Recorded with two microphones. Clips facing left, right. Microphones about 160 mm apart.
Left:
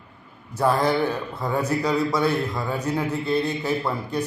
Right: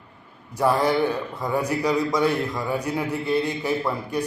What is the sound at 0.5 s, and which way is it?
A man's voice, 15° right (ahead or behind).